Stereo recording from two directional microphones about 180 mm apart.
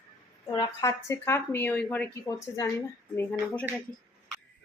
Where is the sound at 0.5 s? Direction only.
20° left (ahead or behind).